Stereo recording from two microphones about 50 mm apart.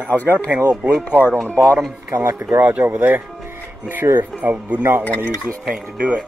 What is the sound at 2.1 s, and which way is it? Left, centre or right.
Speech, right.